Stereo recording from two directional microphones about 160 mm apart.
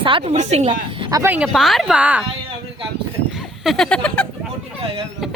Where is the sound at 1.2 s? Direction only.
10° right (ahead or behind).